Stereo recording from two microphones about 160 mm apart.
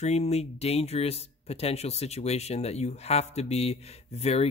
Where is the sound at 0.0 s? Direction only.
45° left (ahead or behind).